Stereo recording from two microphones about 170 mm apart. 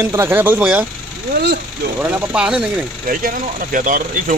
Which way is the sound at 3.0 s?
55° right (ahead or behind).